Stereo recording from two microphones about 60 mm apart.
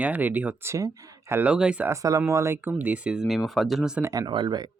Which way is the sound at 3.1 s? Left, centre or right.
Centre.